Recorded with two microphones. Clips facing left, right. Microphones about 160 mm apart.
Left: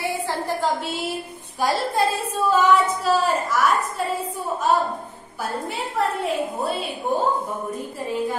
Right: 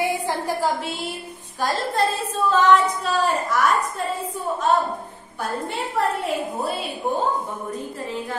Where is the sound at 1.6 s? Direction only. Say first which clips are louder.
Left 1 dB; 10° left (ahead or behind).